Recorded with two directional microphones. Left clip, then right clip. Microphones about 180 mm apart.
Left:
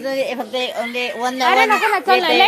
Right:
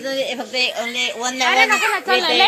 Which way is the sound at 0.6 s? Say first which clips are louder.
Right 4 dB; 40° left (ahead or behind).